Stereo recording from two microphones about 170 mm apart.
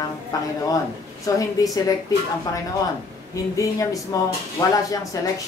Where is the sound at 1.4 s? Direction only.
20° left (ahead or behind).